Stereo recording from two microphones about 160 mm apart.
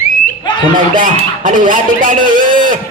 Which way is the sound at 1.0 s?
55° right (ahead or behind).